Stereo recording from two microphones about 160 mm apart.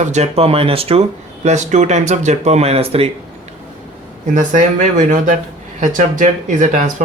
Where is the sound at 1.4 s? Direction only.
45° right (ahead or behind).